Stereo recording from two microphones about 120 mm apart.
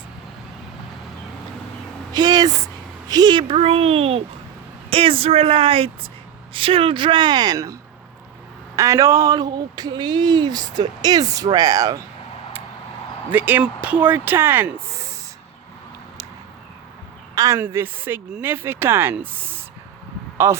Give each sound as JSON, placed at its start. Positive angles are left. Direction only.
{"t": 2.1, "sound": "speech", "side_deg": -35}
{"t": 3.5, "sound": "speech", "side_deg": -55}
{"t": 13.3, "sound": "speech", "side_deg": -15}
{"t": 17.3, "sound": "a woman's voice", "side_deg": -30}
{"t": 17.6, "sound": "speech", "side_deg": -20}